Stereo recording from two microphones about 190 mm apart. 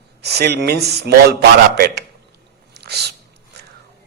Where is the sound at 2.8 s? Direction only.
60° right (ahead or behind).